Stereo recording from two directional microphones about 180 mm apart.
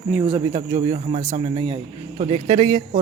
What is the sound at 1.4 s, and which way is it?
Speech, 30° right (ahead or behind).